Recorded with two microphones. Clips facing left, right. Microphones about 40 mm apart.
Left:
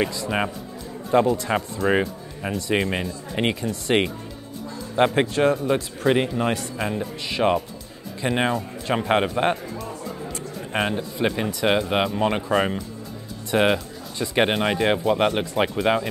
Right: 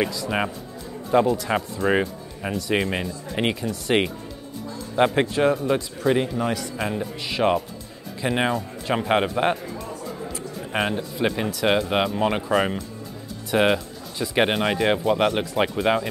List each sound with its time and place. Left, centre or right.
1.1 s speech: centre
6.1 s a man's voice: left
6.8 s speech: centre